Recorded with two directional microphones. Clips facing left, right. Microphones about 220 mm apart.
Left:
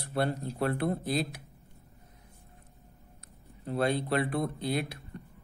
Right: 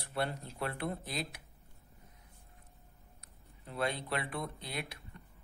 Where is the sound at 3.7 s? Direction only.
35° left (ahead or behind).